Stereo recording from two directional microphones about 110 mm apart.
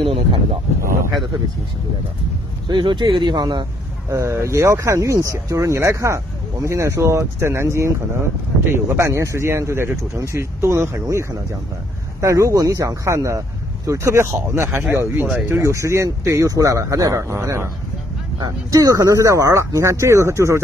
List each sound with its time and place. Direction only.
0.0 s wild animals: 60° right (ahead or behind)
2.7 s speech: 45° right (ahead or behind)
4.1 s speech: 25° right (ahead or behind)